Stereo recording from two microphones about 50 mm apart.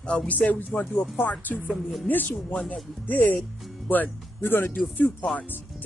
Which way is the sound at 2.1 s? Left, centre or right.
Left.